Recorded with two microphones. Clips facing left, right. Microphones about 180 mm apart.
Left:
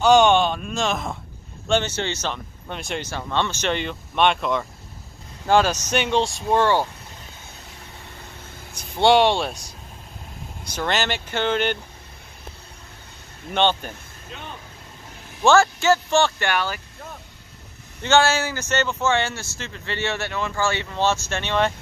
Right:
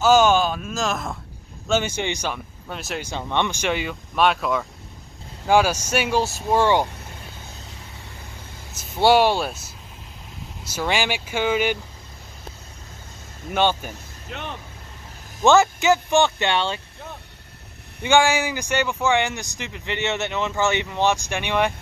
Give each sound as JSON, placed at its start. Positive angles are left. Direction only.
{"t": 0.0, "sound": "speech", "side_deg": 0}
{"t": 1.7, "sound": "speech", "side_deg": -10}
{"t": 3.1, "sound": "speech", "side_deg": -15}
{"t": 8.7, "sound": "speech", "side_deg": -5}
{"t": 13.5, "sound": "speech", "side_deg": -5}
{"t": 14.3, "sound": "speech", "side_deg": -65}
{"t": 15.4, "sound": "speech", "side_deg": -20}
{"t": 18.0, "sound": "speech", "side_deg": -15}